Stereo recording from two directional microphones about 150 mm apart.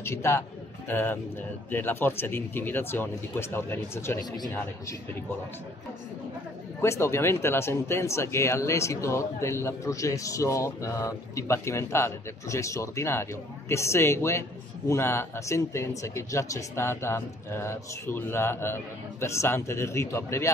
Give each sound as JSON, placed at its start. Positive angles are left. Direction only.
{"t": 0.0, "sound": "speech", "side_deg": 15}
{"t": 6.8, "sound": "speech", "side_deg": 15}